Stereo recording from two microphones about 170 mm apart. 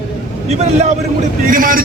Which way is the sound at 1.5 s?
55° right (ahead or behind).